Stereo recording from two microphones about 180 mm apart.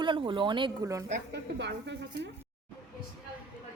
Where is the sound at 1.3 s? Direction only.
75° right (ahead or behind).